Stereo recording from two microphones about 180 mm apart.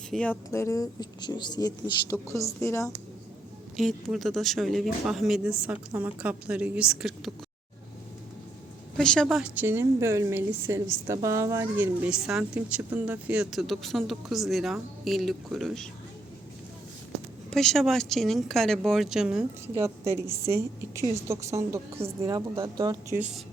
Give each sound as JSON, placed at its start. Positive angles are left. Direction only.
{"t": 0.1, "sound": "speech", "side_deg": 5}
{"t": 3.8, "sound": "speech", "side_deg": 0}
{"t": 9.0, "sound": "a woman's voice", "side_deg": 5}
{"t": 17.5, "sound": "speech", "side_deg": 0}
{"t": 19.7, "sound": "a woman's voice", "side_deg": -15}